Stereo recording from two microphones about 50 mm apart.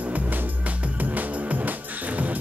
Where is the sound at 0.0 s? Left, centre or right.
Right.